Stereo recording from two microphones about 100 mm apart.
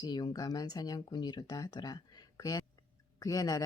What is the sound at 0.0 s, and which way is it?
Speech, 45° left (ahead or behind).